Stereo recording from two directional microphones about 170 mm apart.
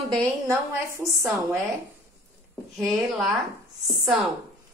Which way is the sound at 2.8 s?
Centre (ahead or behind).